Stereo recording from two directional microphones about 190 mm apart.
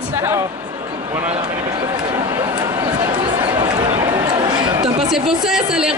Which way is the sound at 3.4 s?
25° right (ahead or behind).